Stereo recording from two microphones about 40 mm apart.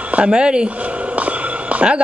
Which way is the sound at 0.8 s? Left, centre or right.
Right.